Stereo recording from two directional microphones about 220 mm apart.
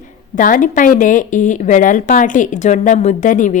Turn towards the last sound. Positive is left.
turn(degrees=35)  # may be behind; listen again after turning